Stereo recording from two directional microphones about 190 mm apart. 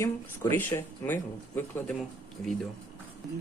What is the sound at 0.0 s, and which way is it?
Speech, 15° left (ahead or behind).